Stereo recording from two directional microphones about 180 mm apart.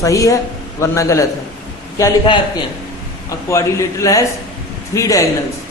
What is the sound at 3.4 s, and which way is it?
Speech, 15° left (ahead or behind).